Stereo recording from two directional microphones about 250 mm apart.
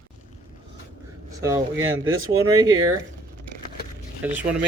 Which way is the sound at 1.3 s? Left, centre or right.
Centre.